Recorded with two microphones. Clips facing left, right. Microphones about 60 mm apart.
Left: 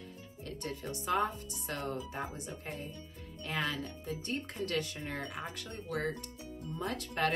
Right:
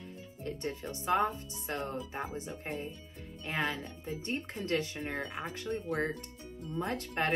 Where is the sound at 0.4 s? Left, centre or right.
Right.